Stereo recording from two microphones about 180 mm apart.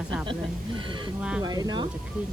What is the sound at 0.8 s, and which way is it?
Speech, 25° right (ahead or behind).